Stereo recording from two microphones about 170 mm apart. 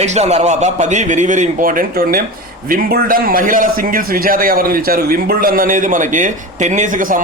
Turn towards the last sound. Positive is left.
turn(degrees=-50)  # may be behind; listen again after turning